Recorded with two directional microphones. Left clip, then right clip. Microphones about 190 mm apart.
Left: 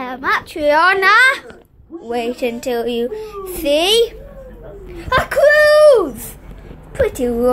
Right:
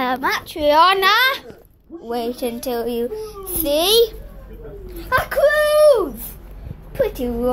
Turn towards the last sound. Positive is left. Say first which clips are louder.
# left 4 dB
turn(degrees=15)  # may be behind; listen again after turning